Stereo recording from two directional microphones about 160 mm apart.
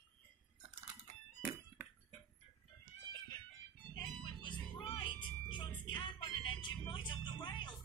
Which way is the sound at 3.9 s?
30° left (ahead or behind).